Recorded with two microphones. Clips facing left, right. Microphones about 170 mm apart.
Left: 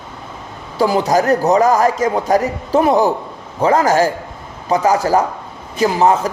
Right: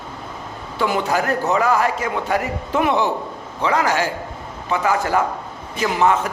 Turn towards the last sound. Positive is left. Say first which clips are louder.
# left 4 dB
turn(degrees=35)  # may be behind; listen again after turning